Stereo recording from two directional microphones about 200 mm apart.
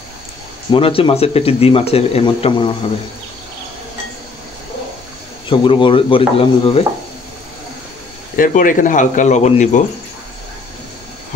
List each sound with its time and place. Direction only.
0.7 s speech: 25° left (ahead or behind)
5.5 s speech: 25° left (ahead or behind)
8.4 s speech: 40° left (ahead or behind)